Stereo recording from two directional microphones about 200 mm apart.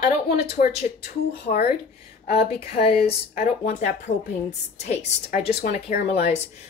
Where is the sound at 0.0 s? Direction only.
50° left (ahead or behind).